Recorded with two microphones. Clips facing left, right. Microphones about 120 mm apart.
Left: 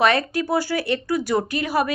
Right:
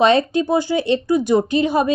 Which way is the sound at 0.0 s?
20° right (ahead or behind).